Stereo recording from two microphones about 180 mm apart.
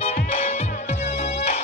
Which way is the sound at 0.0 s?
35° left (ahead or behind).